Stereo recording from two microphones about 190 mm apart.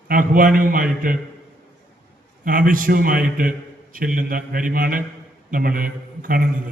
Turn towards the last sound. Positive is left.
turn(degrees=-50)  # may be behind; listen again after turning